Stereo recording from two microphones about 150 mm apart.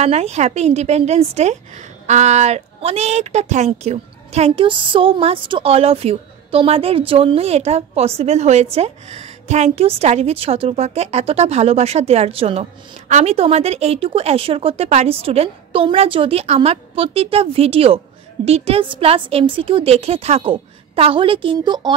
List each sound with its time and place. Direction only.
0.0 s a woman's voice: 45° right (ahead or behind)
4.6 s a woman's voice: 35° right (ahead or behind)